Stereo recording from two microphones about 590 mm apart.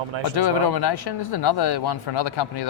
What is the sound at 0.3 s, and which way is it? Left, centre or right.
Speech, left.